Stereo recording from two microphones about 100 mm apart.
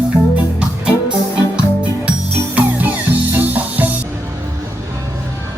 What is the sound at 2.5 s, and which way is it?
Music, 15° right (ahead or behind).